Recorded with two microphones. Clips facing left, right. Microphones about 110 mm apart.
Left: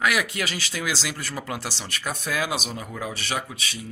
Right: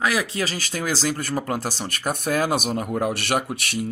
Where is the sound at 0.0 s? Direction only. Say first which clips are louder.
Right 1 dB; 30° right (ahead or behind).